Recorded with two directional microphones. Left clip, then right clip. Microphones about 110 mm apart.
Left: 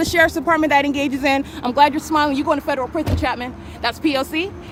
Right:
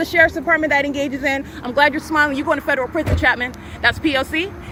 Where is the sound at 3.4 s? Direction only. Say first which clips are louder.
Right 5 dB; 20° left (ahead or behind).